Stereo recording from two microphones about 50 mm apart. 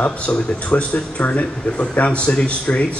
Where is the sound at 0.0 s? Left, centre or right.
Left.